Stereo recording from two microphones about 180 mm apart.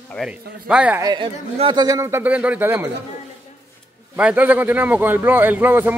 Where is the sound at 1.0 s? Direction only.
25° right (ahead or behind); by 2.9 s 10° right (ahead or behind).